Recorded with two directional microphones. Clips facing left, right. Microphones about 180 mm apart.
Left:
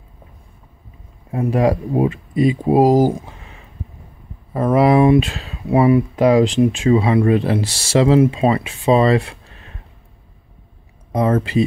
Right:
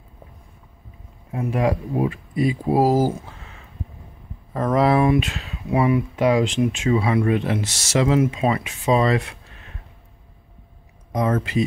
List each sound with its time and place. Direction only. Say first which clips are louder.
1.3 s speech: left 5 dB; 35° left (ahead or behind); by 3.3 s 15° left (ahead or behind)
4.6 s speech: left 4 dB; 10° left (ahead or behind)
5.0 s speech: left 6 dB; 30° left (ahead or behind)
11.1 s speech: left 4 dB; 30° left (ahead or behind)